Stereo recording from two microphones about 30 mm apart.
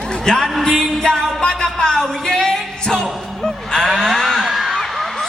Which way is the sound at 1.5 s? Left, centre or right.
Centre.